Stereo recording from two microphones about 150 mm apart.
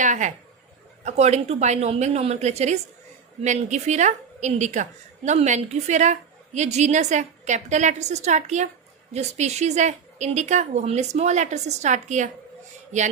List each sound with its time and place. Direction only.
0.0 s a woman's voice: 55° right (ahead or behind)